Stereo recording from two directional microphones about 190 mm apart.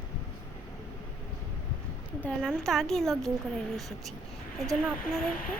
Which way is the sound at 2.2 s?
Centre (ahead or behind).